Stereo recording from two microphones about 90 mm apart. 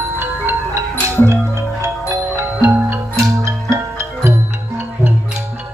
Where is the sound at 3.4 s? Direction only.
30° right (ahead or behind).